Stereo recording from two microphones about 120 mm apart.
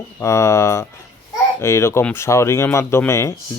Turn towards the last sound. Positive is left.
turn(degrees=25)  # may be behind; listen again after turning